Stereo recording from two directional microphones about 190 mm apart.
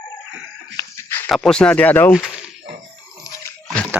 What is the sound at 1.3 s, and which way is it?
Speech, 5° left (ahead or behind).